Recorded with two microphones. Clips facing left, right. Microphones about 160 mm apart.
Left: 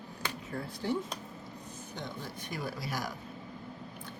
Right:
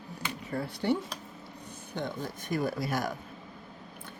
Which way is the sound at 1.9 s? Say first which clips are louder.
Right 7 dB; 50° right (ahead or behind).